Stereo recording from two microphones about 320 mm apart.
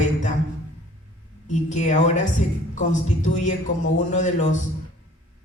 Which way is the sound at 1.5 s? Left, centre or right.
Left.